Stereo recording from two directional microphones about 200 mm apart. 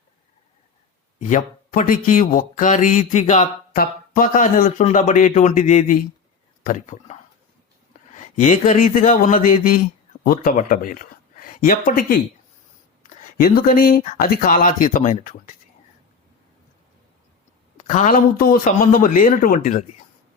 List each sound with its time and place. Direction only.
1.2 s speech: 40° left (ahead or behind)
8.4 s speech: 35° left (ahead or behind)
17.7 s speech: 40° left (ahead or behind)